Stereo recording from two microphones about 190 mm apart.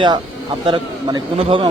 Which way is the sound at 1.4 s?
30° right (ahead or behind).